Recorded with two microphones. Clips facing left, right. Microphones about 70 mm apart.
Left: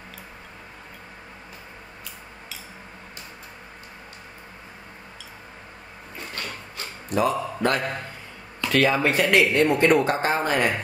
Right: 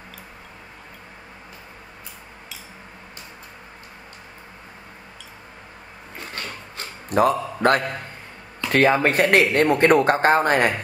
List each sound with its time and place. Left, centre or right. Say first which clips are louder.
6.1 s a sound: right 1 dB; right
7.1 s a man's voice: right 4 dB; right
8.6 s speech: right 3 dB; right